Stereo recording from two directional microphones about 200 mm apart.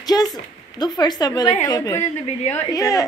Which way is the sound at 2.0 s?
35° left (ahead or behind).